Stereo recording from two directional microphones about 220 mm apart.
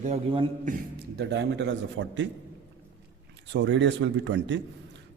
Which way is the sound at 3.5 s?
55° right (ahead or behind).